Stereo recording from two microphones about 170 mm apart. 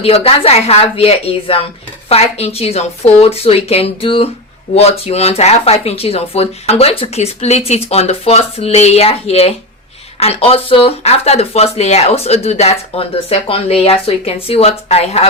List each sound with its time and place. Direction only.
0.0 s speech: 35° left (ahead or behind)